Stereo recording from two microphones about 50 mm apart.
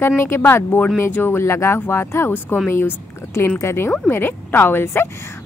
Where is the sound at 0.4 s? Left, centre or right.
Left.